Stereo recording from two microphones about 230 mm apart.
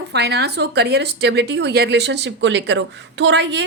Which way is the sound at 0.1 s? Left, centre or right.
Right.